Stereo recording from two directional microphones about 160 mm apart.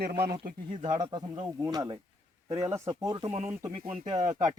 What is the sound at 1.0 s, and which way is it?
Speech, 25° right (ahead or behind).